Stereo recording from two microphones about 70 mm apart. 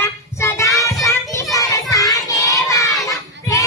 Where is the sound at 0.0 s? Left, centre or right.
Left.